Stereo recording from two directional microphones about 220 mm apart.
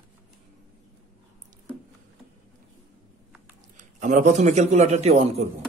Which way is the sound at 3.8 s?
35° right (ahead or behind).